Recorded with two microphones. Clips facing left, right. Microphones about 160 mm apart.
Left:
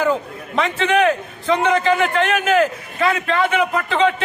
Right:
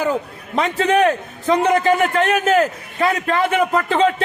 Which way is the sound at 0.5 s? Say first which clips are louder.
Right 1 dB; 40° right (ahead or behind).